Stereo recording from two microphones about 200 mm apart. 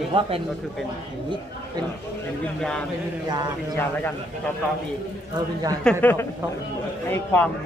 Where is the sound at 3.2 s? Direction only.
20° right (ahead or behind).